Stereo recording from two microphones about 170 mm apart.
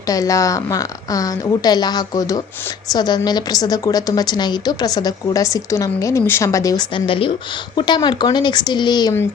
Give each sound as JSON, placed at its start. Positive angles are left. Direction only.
{"t": 0.1, "sound": "a woman's voice", "side_deg": 20}